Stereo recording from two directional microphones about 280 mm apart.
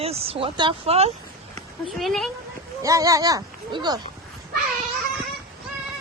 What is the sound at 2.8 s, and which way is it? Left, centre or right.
A woman's voice, centre.